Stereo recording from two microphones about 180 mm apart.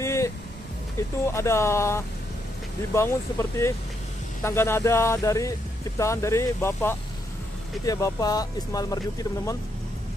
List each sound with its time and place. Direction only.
0.0 s vehicle: 15° left (ahead or behind)
1.2 s speech: 15° left (ahead or behind)